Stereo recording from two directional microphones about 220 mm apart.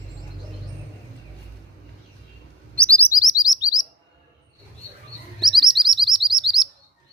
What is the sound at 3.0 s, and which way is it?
Chirp, 15° left (ahead or behind).